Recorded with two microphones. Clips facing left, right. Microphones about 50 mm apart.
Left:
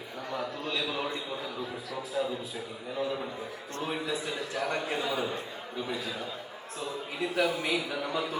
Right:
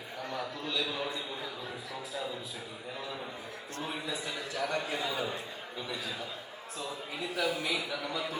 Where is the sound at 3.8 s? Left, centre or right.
Left.